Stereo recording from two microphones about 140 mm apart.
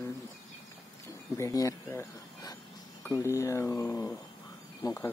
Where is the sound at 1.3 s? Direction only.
25° left (ahead or behind).